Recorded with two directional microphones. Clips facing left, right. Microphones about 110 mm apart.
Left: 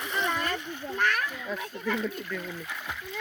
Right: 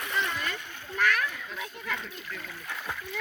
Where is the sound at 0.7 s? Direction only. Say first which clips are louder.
Right 2 dB; 30° left (ahead or behind).